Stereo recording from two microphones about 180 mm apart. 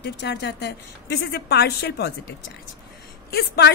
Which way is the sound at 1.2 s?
65° left (ahead or behind).